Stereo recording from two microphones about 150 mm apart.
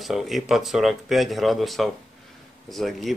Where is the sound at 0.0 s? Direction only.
Centre (ahead or behind).